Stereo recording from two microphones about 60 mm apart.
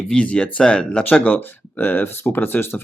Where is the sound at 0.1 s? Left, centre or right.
Centre.